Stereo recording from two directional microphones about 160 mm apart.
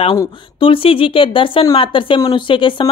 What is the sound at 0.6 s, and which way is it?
A woman's voice, 35° left (ahead or behind).